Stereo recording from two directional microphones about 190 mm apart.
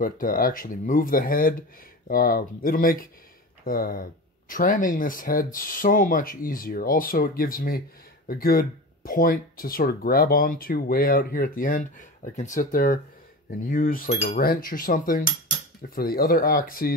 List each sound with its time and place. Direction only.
0.0 s speech: 45° left (ahead or behind)
14.1 s cutlery: 35° left (ahead or behind)
14.4 s speech: 50° left (ahead or behind)